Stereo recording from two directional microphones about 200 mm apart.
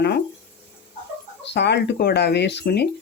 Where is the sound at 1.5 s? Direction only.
55° left (ahead or behind).